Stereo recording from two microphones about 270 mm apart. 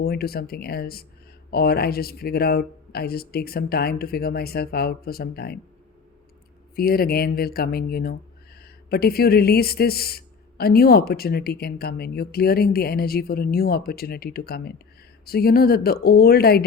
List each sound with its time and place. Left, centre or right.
0.0 s speech: left
6.7 s speech: left